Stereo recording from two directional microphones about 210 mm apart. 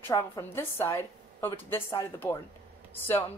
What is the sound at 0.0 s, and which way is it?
A woman's voice, 10° left (ahead or behind).